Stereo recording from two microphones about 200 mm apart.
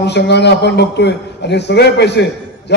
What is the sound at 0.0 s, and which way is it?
A man's voice, 60° left (ahead or behind).